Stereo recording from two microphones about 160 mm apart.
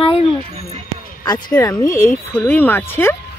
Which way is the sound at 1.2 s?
25° left (ahead or behind).